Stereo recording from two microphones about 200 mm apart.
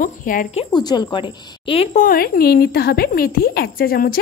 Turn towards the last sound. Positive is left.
turn(degrees=50)  # may be behind; listen again after turning